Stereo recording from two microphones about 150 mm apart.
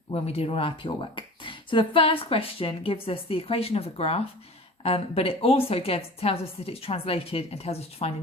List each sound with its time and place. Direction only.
0.1 s speech: 40° left (ahead or behind)